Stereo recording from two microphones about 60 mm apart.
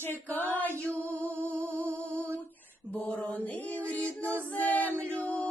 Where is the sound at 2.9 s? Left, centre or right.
Centre.